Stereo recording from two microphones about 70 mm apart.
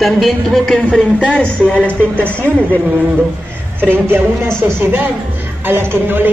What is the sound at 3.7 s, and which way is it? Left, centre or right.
Speech, right.